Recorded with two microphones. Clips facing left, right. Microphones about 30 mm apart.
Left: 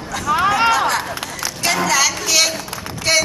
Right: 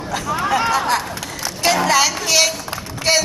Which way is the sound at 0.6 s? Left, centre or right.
Left.